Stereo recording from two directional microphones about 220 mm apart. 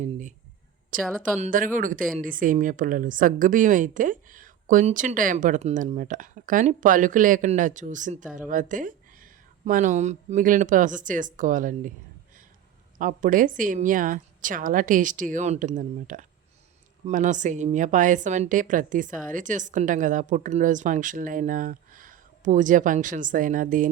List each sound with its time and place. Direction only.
0.0 s a sound: 35° right (ahead or behind)
1.2 s a woman's voice: 40° right (ahead or behind)
13.0 s a woman's voice: 35° right (ahead or behind)